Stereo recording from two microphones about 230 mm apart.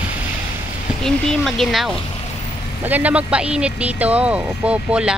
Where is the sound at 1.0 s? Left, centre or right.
Centre.